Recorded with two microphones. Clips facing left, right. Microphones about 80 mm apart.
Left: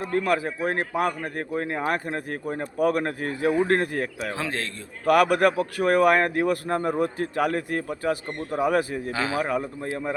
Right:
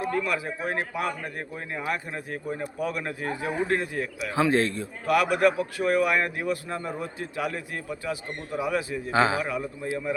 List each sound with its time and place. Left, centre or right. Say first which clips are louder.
0.1 s a man's voice: left 4 dB; left
4.4 s a man's voice: right 7 dB; centre
5.0 s a man's voice: left 3 dB; left
9.1 s a man's voice: right 6 dB; right
9.4 s a man's voice: left 4 dB; left